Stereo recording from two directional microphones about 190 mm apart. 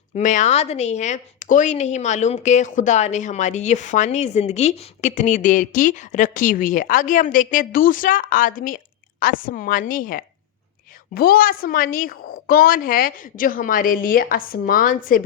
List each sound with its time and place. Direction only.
0.2 s a woman's voice: 40° left (ahead or behind)